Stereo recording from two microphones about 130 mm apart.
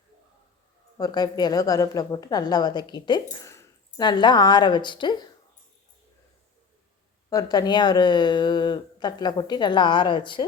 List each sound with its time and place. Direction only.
0.9 s speech: 30° left (ahead or behind)
3.3 s squish: 20° left (ahead or behind)
4.0 s speech: 35° left (ahead or behind)
7.3 s speech: 30° left (ahead or behind)